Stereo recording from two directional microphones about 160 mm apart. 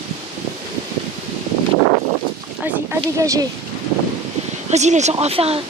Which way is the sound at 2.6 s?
15° right (ahead or behind).